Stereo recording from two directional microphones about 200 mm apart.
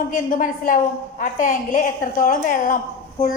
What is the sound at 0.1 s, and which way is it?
A woman's voice, 45° left (ahead or behind).